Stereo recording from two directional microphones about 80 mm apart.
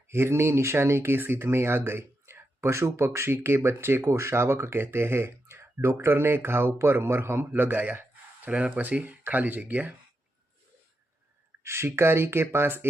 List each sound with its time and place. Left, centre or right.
0.1 s speech: right
11.6 s speech: right